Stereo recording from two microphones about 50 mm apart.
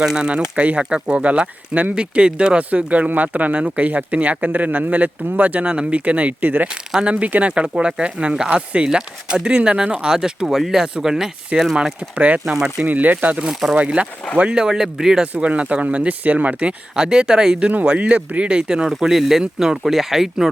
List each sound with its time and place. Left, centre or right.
0.0 s speech: centre
12.1 s speech: right
13.4 s speech: centre
13.7 s speech: right
15.2 s speech: right
17.6 s speech: right
18.9 s speech: centre